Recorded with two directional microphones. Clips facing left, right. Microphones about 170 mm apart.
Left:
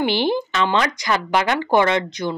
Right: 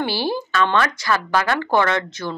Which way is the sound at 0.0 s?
20° left (ahead or behind).